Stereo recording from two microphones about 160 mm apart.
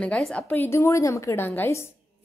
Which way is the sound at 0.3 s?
10° left (ahead or behind).